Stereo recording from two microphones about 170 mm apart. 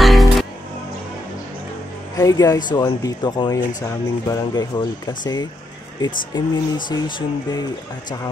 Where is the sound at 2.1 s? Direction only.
20° left (ahead or behind).